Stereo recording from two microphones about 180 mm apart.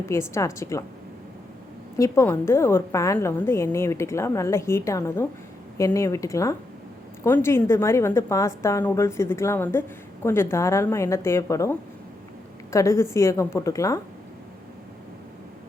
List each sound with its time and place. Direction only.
0.0 s a woman's voice: 15° left (ahead or behind)
2.0 s a woman's voice: 15° left (ahead or behind)